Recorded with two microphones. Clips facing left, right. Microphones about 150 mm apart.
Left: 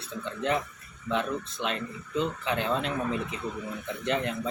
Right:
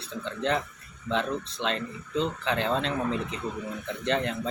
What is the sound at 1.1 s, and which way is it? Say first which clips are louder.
Speech: right 1 dB; 30° right (ahead or behind).